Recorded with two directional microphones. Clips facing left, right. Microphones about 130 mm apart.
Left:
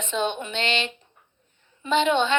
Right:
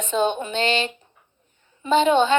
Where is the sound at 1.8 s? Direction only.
40° right (ahead or behind).